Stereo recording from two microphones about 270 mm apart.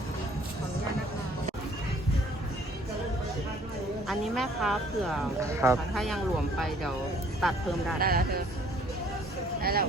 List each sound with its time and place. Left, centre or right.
4.1 s speech: centre
5.4 s speech: centre
5.9 s speech: centre
7.9 s speech: right
9.6 s vehicle: right